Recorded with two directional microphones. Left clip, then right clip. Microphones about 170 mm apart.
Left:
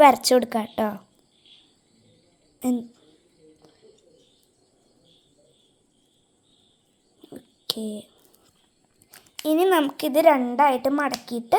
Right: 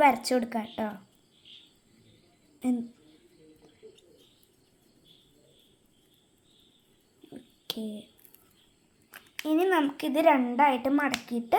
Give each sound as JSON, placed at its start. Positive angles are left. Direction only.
{"t": 0.0, "sound": "speech", "side_deg": 45}
{"t": 2.6, "sound": "a woman's voice", "side_deg": 45}
{"t": 7.2, "sound": "a sound", "side_deg": 40}
{"t": 9.4, "sound": "speech", "side_deg": 50}